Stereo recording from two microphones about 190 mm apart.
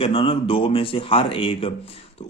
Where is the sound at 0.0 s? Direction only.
30° left (ahead or behind).